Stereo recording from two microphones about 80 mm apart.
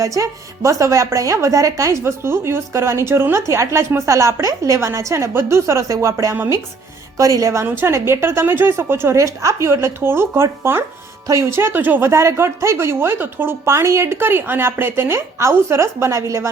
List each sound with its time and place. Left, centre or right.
0.0 s a woman's voice: right